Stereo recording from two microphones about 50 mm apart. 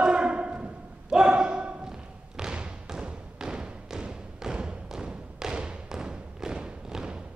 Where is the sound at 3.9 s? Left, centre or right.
Centre.